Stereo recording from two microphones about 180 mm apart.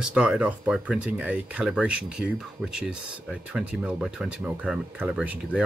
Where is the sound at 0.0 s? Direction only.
5° right (ahead or behind).